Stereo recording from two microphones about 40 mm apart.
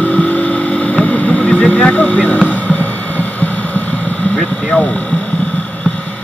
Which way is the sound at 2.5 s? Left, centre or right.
Left.